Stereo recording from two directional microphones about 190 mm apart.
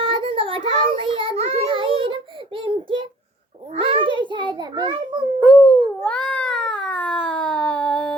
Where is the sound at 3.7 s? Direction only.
30° right (ahead or behind).